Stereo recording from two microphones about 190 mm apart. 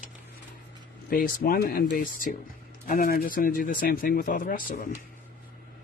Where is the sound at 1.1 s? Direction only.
50° left (ahead or behind).